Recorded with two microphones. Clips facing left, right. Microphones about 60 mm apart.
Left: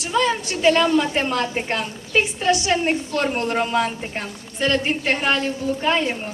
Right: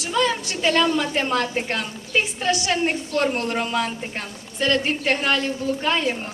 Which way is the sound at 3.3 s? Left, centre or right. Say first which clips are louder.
Left 3 dB; centre.